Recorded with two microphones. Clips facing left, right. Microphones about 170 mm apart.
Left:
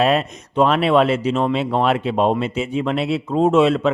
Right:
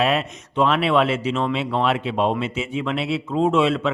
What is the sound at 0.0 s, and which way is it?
A man's voice, 40° left (ahead or behind).